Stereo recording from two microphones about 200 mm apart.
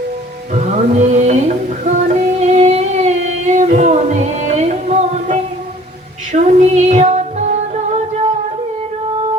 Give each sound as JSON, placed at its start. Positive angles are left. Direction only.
{"t": 0.5, "sound": "music", "side_deg": -35}
{"t": 6.3, "sound": "female singing", "side_deg": -35}